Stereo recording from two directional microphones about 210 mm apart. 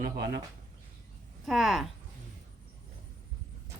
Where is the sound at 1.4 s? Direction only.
Centre (ahead or behind).